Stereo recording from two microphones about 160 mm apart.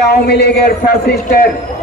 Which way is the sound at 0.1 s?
75° left (ahead or behind).